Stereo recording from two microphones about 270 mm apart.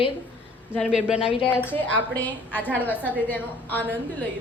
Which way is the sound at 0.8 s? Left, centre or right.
Centre.